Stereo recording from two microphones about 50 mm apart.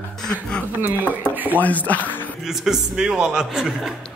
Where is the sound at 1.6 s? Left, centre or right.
Left.